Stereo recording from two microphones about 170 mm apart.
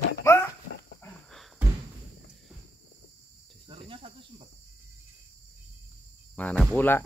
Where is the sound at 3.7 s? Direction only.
35° right (ahead or behind).